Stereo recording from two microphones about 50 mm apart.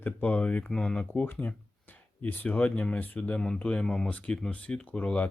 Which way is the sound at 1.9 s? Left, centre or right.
Left.